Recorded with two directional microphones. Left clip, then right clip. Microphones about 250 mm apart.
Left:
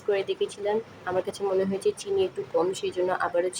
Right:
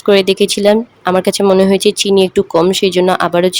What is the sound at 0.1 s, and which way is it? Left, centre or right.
Speech, right.